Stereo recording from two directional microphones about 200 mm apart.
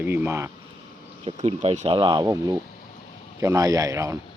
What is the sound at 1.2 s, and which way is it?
Speech, 30° right (ahead or behind).